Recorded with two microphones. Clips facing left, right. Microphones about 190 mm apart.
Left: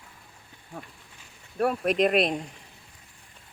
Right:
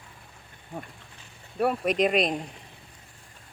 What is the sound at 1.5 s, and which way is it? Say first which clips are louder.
Speech: even; centre (ahead or behind).